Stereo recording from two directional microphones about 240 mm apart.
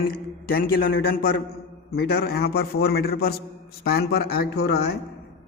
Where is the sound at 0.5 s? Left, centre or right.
Left.